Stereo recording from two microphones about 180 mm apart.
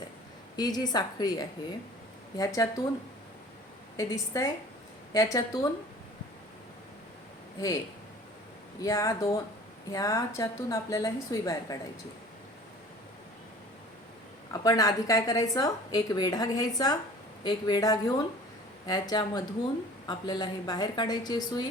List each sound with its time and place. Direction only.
0.5 s a woman's voice: 20° left (ahead or behind)
3.9 s a woman's voice: 20° left (ahead or behind)
8.8 s a woman's voice: 20° left (ahead or behind)
14.5 s a woman's voice: 20° left (ahead or behind)